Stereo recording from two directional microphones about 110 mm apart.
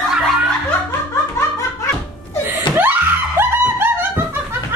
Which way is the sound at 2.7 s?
45° left (ahead or behind).